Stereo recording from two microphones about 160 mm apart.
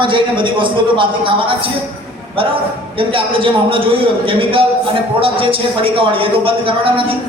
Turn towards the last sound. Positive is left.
turn(degrees=-35)  # may be behind; listen again after turning